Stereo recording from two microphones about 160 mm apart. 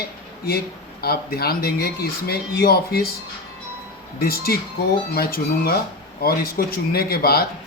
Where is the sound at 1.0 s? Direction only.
75° left (ahead or behind).